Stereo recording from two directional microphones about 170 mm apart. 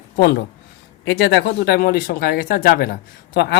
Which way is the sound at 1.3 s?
70° left (ahead or behind).